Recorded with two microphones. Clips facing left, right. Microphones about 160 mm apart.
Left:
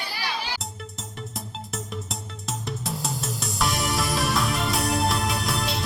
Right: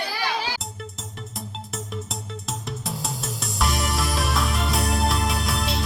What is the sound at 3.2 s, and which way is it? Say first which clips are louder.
Music: right 1 dB; centre (ahead or behind).